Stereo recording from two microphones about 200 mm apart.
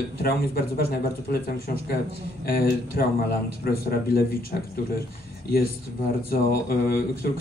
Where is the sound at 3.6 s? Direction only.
50° left (ahead or behind).